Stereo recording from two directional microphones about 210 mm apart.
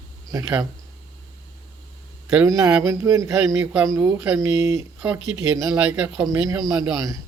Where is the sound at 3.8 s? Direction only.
15° right (ahead or behind).